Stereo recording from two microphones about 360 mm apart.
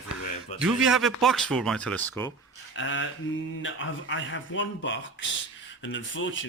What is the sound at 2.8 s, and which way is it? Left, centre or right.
Speech, left.